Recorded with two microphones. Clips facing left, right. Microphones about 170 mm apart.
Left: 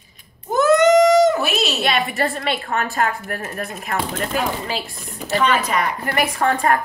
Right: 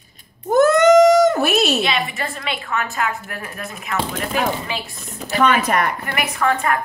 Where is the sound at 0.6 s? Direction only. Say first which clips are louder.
Right 2 dB; 50° right (ahead or behind).